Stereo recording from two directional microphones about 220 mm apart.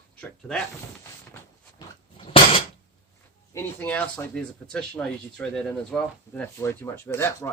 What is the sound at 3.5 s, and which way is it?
Speech, 10° left (ahead or behind).